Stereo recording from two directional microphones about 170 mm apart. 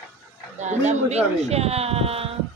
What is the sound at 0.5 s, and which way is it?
Speech, 45° right (ahead or behind).